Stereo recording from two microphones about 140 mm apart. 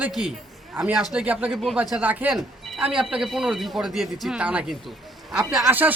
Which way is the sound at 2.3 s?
Centre (ahead or behind).